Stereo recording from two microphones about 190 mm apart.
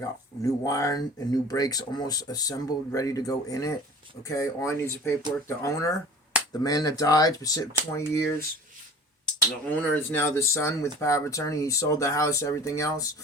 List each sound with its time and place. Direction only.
0.6 s speech: 15° left (ahead or behind)